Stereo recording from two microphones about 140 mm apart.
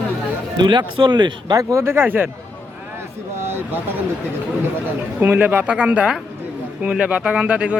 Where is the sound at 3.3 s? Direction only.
15° right (ahead or behind).